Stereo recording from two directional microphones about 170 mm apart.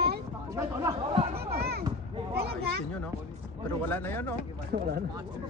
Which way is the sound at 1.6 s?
70° right (ahead or behind).